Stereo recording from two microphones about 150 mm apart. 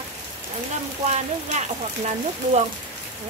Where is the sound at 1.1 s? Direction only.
50° right (ahead or behind).